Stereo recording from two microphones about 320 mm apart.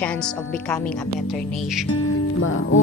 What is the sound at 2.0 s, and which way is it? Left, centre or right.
Speech, left.